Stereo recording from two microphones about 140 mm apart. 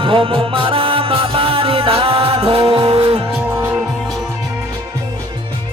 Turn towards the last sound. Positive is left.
turn(degrees=-15)  # may be behind; listen again after turning